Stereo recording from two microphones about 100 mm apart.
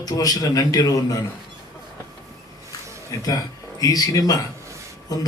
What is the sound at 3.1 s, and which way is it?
A man's voice, 35° left (ahead or behind).